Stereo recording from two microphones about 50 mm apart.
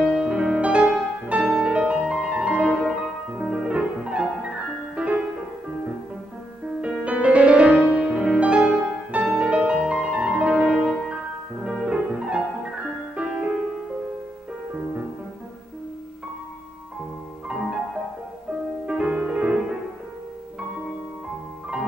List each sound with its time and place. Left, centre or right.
0.0 s music: right
6.8 s music: right
14.7 s music: right
18.9 s music: right